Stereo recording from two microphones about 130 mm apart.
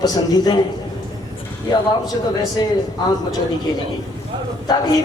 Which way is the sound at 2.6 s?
35° left (ahead or behind).